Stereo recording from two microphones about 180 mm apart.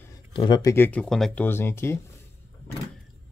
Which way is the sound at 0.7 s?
10° left (ahead or behind).